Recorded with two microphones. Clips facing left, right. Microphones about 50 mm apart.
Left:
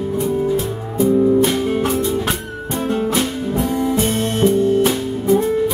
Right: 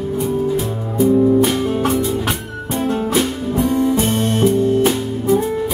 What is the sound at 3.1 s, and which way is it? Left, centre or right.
Music, centre.